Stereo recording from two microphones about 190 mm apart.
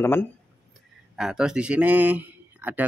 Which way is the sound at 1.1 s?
5° right (ahead or behind).